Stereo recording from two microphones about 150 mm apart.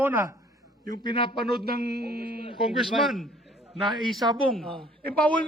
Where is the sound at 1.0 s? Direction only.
30° left (ahead or behind).